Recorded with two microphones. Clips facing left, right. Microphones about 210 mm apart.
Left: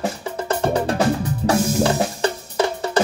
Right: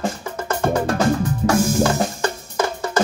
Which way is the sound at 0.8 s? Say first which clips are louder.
Right 1 dB; 35° left (ahead or behind).